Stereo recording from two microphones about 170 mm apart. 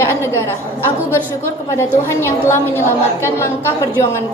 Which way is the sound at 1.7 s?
15° left (ahead or behind).